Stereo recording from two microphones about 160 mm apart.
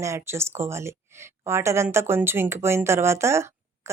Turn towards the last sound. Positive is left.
turn(degrees=-15)  # may be behind; listen again after turning